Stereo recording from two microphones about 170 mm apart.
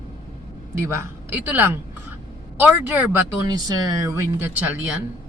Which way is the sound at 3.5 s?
20° right (ahead or behind).